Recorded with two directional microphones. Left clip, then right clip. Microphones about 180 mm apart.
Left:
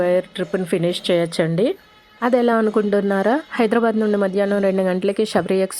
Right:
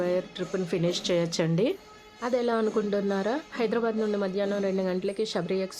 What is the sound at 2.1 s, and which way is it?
Speech, 45° left (ahead or behind).